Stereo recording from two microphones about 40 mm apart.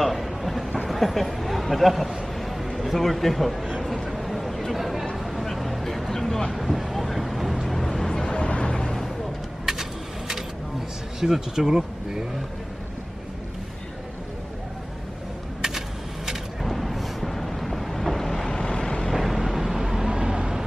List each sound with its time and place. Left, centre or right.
0.0 s vehicle: centre
0.8 s a sound: centre
2.8 s speech: centre
3.9 s a sound: centre
6.5 s vehicle: centre
8.1 s vehicle: centre
8.5 s a sound: left
8.8 s a sound: centre
9.7 s vehicle: centre
11.1 s speech: centre
16.6 s vehicle: centre
19.1 s vehicle: centre
20.1 s vehicle: centre